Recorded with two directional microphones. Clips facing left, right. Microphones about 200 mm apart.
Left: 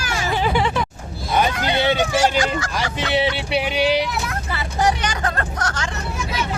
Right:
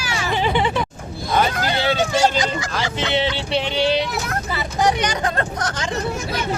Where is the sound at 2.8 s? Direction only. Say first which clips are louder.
Even; 10° left (ahead or behind).